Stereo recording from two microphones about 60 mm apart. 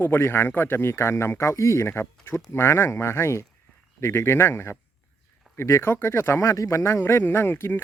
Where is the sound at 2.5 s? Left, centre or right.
Left.